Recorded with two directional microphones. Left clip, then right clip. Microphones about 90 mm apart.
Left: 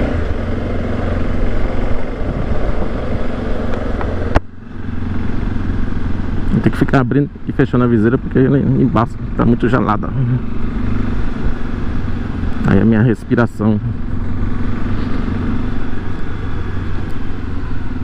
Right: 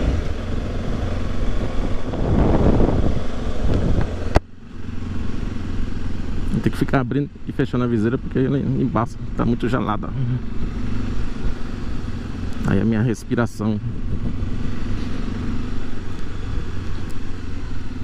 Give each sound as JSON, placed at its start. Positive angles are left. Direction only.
{"t": 6.5, "sound": "speech", "side_deg": -5}
{"t": 12.6, "sound": "speech", "side_deg": -15}